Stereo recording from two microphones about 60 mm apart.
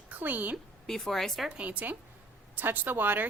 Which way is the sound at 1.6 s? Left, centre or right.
Right.